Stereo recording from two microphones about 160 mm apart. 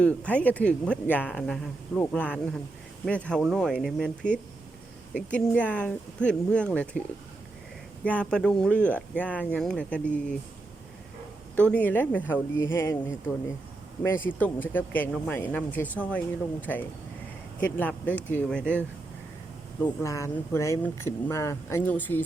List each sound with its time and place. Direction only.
0.3 s speech: 10° left (ahead or behind)
8.0 s speech: 10° left (ahead or behind)
11.5 s speech: 10° left (ahead or behind)
19.8 s speech: 20° left (ahead or behind)